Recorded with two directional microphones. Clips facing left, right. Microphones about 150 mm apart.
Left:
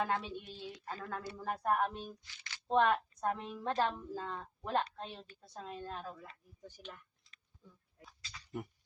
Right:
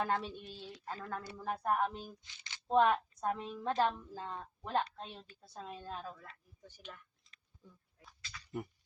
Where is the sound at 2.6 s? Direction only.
5° right (ahead or behind).